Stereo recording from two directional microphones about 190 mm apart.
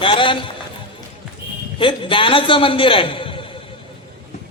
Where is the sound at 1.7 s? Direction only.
25° left (ahead or behind).